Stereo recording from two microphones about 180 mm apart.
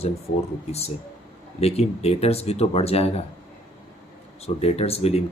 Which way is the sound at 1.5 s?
35° left (ahead or behind).